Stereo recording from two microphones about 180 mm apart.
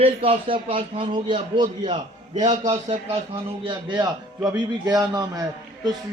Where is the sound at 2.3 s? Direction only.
40° right (ahead or behind).